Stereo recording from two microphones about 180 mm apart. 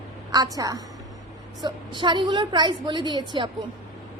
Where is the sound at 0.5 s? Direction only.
20° right (ahead or behind).